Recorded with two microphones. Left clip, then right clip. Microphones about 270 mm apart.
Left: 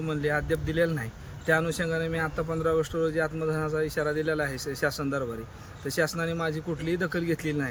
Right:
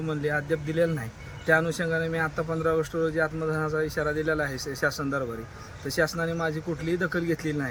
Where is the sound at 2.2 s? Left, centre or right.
Centre.